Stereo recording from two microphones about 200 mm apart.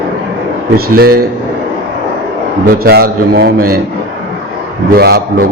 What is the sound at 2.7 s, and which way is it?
A man's voice, 50° right (ahead or behind).